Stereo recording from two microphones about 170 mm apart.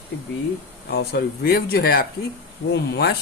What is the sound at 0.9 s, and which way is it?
Speech, 65° left (ahead or behind).